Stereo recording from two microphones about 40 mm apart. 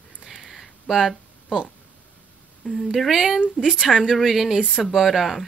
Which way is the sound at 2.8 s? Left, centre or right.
Centre.